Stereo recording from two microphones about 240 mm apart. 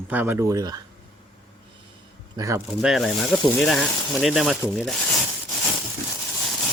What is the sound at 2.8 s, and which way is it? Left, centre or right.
Speech, centre.